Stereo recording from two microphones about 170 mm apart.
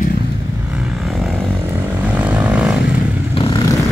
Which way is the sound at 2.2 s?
10° right (ahead or behind).